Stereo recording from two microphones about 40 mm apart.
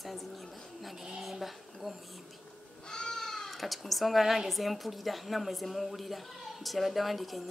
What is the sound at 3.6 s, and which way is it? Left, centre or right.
A woman's voice, centre.